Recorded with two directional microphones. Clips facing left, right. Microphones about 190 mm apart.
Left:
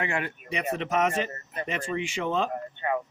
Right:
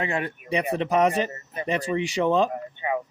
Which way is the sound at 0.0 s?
30° right (ahead or behind).